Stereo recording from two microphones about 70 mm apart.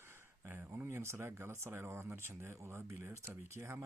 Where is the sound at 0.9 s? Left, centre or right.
Right.